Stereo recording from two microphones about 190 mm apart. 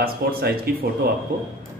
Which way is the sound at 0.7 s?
50° right (ahead or behind).